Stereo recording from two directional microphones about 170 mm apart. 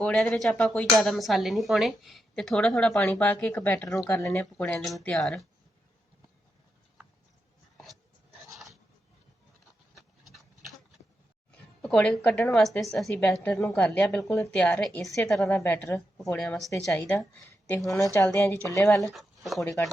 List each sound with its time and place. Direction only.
0.0 s a woman's voice: 5° left (ahead or behind)
4.8 s speech: centre (ahead or behind)
11.8 s a woman's voice: 5° left (ahead or behind)
16.6 s a woman's voice: 15° left (ahead or behind)
19.0 s speech: centre (ahead or behind)